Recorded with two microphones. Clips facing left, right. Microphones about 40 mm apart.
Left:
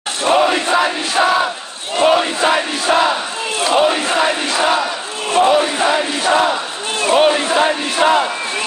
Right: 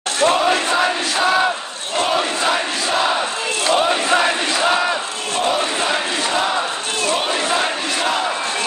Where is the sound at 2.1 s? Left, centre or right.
Centre.